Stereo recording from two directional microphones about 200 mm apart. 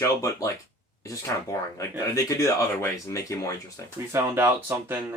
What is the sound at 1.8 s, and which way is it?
Speech, 15° left (ahead or behind).